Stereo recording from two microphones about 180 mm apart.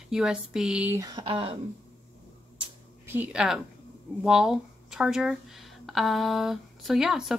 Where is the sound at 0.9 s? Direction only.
20° right (ahead or behind).